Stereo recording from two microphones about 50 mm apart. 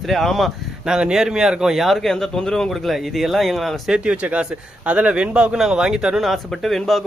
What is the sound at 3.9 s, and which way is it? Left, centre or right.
Speech, right.